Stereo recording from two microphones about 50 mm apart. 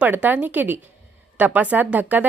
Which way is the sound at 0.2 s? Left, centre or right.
Right.